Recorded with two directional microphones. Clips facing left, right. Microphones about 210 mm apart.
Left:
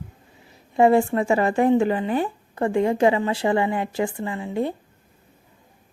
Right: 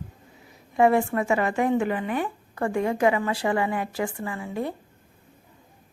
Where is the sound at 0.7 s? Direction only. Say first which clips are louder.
Left 3 dB; 30° left (ahead or behind).